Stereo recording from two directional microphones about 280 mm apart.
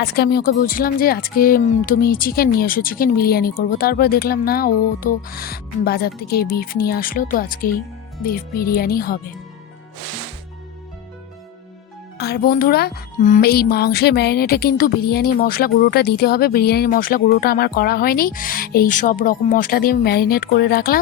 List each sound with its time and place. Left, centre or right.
0.0 s speech: left
12.1 s speech: left